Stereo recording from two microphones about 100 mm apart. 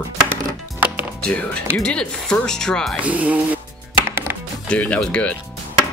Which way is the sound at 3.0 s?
15° right (ahead or behind).